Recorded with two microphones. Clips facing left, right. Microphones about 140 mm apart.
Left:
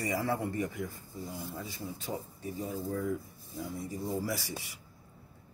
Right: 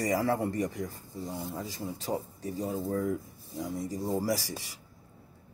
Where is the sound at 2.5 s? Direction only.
45° right (ahead or behind).